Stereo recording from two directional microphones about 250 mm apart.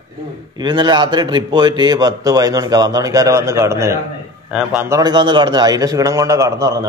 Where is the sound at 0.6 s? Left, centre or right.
Centre.